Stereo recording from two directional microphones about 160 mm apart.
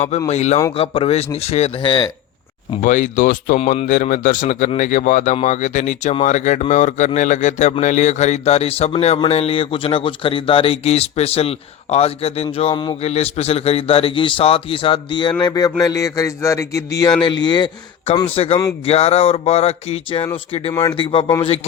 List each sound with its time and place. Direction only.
0.3 s speech: 45° left (ahead or behind)
2.8 s speech: 55° left (ahead or behind); by 13.0 s 25° left (ahead or behind)
13.0 s a man's voice: 40° left (ahead or behind)